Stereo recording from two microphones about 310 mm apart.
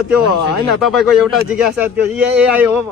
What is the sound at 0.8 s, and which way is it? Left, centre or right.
Speech, centre.